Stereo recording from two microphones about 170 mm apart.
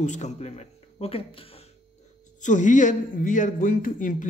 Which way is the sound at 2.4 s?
45° left (ahead or behind).